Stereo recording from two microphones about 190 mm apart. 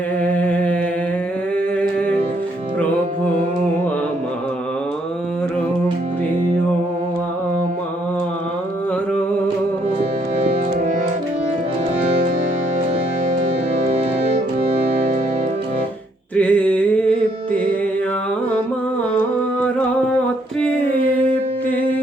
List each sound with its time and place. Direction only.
0.2 s humming: 10° left (ahead or behind)
13.9 s organ: 35° right (ahead or behind)
16.3 s a sound: 5° left (ahead or behind)